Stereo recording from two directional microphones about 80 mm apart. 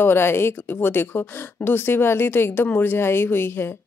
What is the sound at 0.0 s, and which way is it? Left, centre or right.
Speech, left.